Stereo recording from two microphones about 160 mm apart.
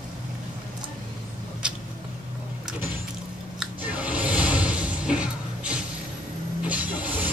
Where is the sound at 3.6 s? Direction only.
10° right (ahead or behind).